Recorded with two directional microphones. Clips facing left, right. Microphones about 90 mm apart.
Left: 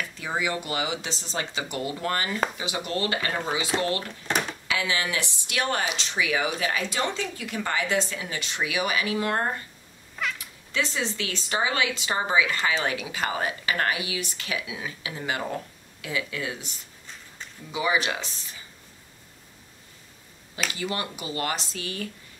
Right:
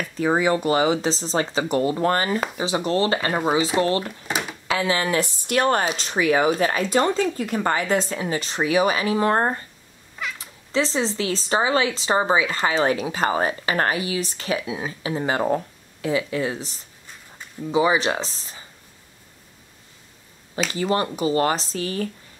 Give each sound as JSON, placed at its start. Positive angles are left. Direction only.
{"t": 0.0, "sound": "speech", "side_deg": -40}
{"t": 3.7, "sound": "speech", "side_deg": -5}
{"t": 4.3, "sound": "a sound", "side_deg": -5}
{"t": 4.6, "sound": "speech", "side_deg": -35}
{"t": 20.7, "sound": "speech", "side_deg": -35}